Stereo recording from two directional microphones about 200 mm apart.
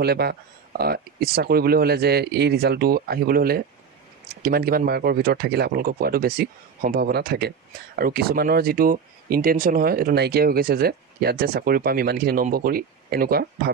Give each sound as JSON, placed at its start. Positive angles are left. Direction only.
{"t": 0.0, "sound": "speech", "side_deg": -50}